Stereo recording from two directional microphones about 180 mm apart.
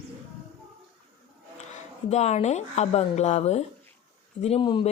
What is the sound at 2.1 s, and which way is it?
Speech, 40° left (ahead or behind).